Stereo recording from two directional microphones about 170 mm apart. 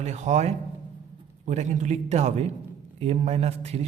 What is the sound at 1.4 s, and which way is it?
A man's voice, 45° right (ahead or behind).